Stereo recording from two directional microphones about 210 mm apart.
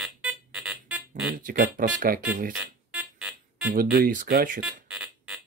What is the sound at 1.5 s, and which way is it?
Speech, 40° right (ahead or behind).